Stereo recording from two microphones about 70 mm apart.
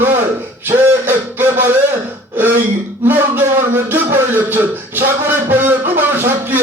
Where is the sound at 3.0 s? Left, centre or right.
Right.